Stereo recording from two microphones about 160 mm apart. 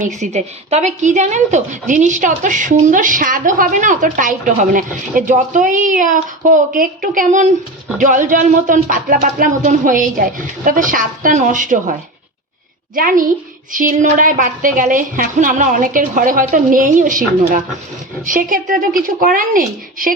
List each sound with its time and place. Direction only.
0.0 s a woman's voice: 50° right (ahead or behind)
13.0 s speech: 60° right (ahead or behind)